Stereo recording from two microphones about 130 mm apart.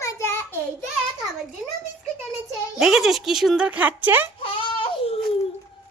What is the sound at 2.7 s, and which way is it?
Speech, centre (ahead or behind).